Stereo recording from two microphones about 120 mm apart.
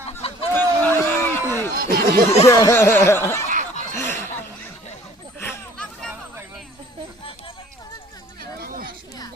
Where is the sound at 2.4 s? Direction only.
25° left (ahead or behind).